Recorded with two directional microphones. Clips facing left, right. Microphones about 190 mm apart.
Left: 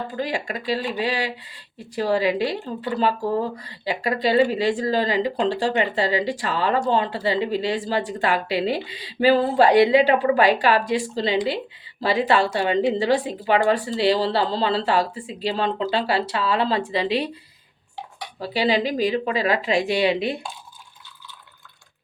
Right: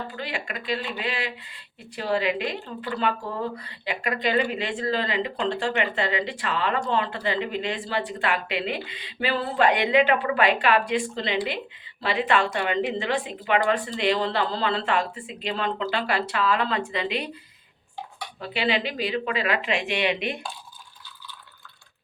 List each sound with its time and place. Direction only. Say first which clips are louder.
0.2 s speech: left 6 dB; 40° left (ahead or behind)
18.3 s speech: left 5 dB; 35° left (ahead or behind)